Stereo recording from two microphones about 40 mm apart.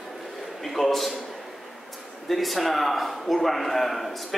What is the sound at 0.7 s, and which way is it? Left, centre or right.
Speech, centre.